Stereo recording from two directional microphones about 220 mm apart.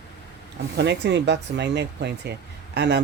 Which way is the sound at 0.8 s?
50° right (ahead or behind).